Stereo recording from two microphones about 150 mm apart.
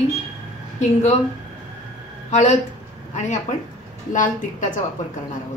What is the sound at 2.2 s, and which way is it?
Speech, 50° left (ahead or behind).